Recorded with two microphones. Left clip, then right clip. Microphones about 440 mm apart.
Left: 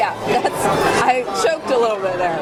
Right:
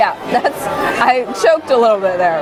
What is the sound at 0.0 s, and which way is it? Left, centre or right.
Chatter, right.